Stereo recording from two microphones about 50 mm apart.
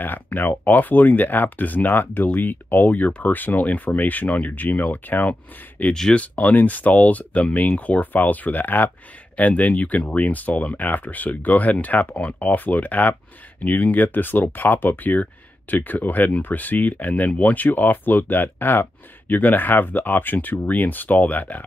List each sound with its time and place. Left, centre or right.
0.0 s speech: left